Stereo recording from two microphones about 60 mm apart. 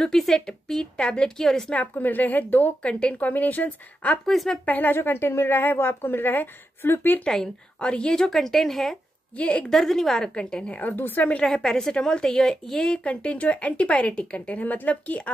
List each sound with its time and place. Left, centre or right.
0.0 s a woman's voice: centre
1.7 s a woman's voice: left
2.8 s a woman's voice: centre
4.3 s speech: centre
4.6 s a woman's voice: left
7.2 s a woman's voice: centre
9.4 s a woman's voice: left
9.7 s a woman's voice: centre
10.8 s a woman's voice: left
11.4 s a woman's voice: centre; by 15.3 s left